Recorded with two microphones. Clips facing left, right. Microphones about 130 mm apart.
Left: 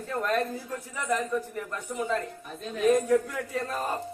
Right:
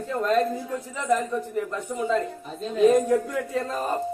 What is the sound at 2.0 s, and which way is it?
Speech, 20° right (ahead or behind).